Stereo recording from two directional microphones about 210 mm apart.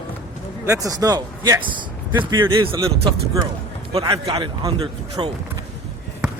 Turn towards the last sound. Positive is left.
turn(degrees=-20)  # may be behind; listen again after turning